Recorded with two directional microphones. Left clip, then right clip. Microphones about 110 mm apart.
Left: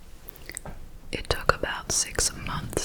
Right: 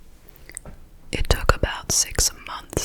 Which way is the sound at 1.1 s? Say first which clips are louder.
Right 3 dB; 30° right (ahead or behind).